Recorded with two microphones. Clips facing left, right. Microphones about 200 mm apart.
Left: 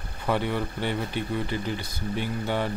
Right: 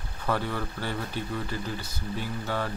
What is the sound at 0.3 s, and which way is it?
Speech, 20° left (ahead or behind).